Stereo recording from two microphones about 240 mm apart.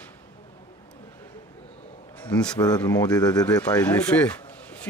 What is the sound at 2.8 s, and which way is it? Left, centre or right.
Speech, centre.